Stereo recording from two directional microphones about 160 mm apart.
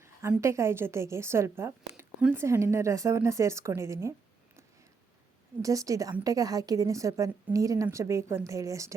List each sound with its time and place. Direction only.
0.0 s a woman's voice: 15° right (ahead or behind)
5.6 s a woman's voice: 20° right (ahead or behind)